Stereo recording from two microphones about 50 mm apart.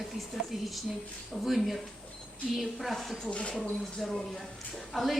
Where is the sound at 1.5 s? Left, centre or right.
Centre.